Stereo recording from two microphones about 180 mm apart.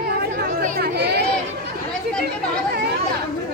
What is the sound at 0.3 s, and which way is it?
Chatter, 60° right (ahead or behind).